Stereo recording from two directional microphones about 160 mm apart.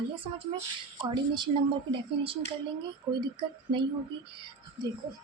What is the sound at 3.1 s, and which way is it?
Speech, 30° right (ahead or behind).